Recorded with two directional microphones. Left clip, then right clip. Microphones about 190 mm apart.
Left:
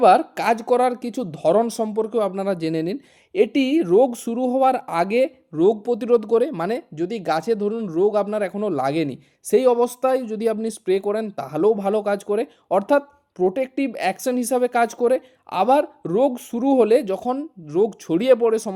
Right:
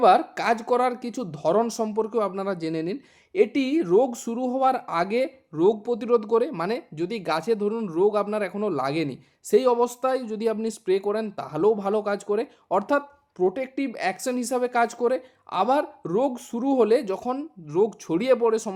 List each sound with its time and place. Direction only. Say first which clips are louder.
0.0 s speech: left 3 dB; 30° left (ahead or behind)